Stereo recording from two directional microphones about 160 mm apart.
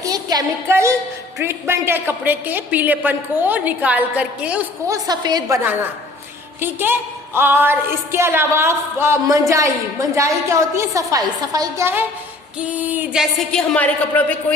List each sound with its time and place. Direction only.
0.0 s music: 25° right (ahead or behind)
1.4 s a woman's voice: 15° right (ahead or behind)
4.9 s a woman's voice: 25° right (ahead or behind)
6.6 s a woman's voice: 15° right (ahead or behind)
13.5 s a man's voice: 5° left (ahead or behind)